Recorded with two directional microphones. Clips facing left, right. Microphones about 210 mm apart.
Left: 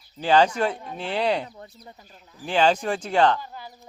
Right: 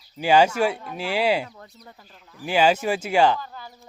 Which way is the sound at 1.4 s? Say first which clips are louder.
Left 1 dB; 30° left (ahead or behind).